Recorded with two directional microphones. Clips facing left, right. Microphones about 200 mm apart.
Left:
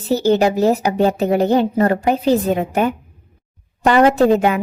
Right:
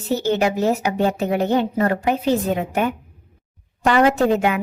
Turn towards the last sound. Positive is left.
turn(degrees=35)  # may be behind; listen again after turning